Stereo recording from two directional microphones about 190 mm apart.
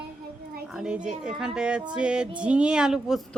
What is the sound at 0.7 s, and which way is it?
A woman's voice, 5° right (ahead or behind).